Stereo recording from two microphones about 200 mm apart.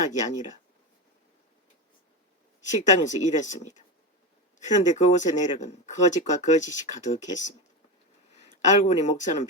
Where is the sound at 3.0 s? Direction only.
35° left (ahead or behind).